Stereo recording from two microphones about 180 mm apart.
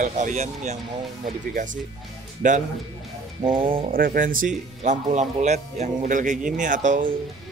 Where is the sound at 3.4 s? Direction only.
25° right (ahead or behind).